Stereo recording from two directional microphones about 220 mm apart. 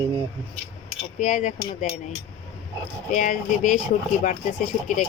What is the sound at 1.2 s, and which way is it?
Speech, 35° left (ahead or behind).